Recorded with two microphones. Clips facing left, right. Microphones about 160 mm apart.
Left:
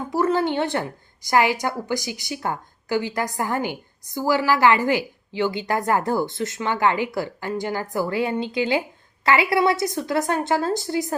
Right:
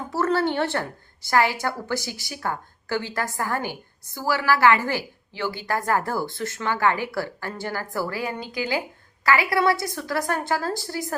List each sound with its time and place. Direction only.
0.1 s a woman's voice: 15° left (ahead or behind)